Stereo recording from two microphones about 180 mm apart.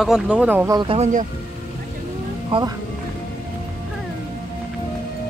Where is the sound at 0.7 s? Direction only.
25° right (ahead or behind).